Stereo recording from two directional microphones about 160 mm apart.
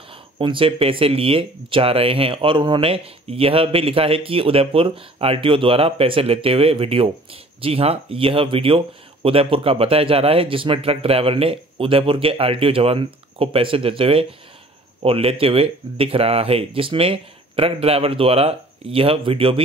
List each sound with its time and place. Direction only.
0.1 s speech: 30° right (ahead or behind)